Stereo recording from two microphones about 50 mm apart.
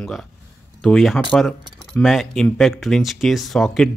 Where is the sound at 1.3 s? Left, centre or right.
Centre.